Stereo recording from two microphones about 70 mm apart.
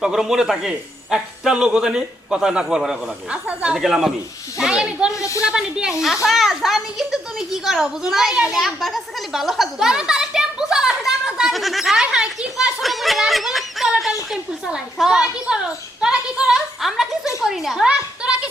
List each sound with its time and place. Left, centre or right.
0.0 s a man's voice: centre
3.8 s a man's voice: centre
5.1 s a woman's voice: left
5.5 s a child's voice: centre
12.1 s a sound: centre
12.8 s music: centre
14.9 s a man's voice: centre
17.8 s a sound: centre